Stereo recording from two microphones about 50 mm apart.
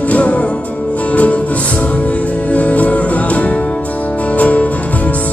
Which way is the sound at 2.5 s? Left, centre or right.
Left.